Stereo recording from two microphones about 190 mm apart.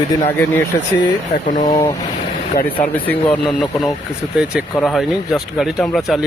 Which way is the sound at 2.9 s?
10° left (ahead or behind).